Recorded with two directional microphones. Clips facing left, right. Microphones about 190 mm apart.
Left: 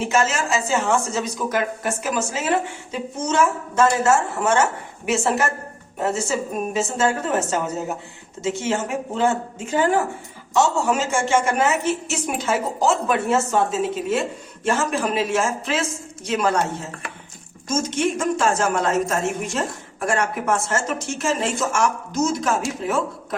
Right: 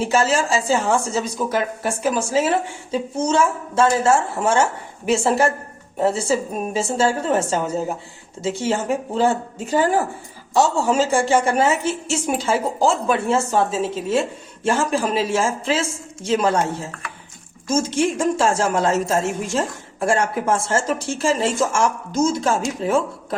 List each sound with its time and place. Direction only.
0.0 s a woman's voice: 35° right (ahead or behind)
17.7 s a woman's voice: 30° right (ahead or behind)